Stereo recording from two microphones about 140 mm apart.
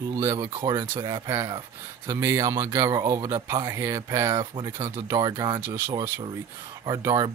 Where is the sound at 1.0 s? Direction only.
25° right (ahead or behind).